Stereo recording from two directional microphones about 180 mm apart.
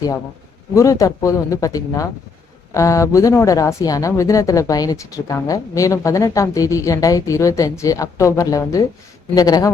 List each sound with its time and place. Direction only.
0.7 s speech: 15° left (ahead or behind)